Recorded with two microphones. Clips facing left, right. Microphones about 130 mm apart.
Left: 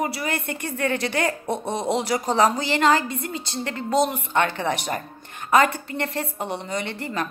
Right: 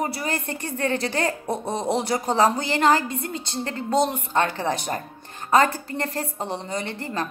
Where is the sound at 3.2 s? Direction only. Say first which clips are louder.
Even; 25° right (ahead or behind).